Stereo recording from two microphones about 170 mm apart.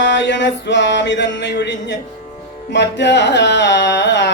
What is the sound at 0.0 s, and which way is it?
Music, 90° left.